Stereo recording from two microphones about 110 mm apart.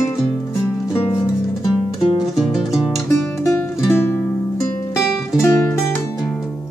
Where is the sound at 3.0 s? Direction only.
25° left (ahead or behind).